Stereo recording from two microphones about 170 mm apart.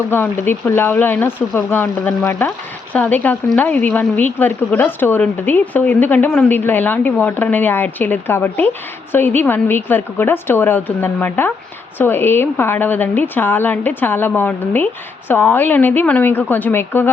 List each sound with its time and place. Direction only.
0.1 s a woman's voice: 10° left (ahead or behind)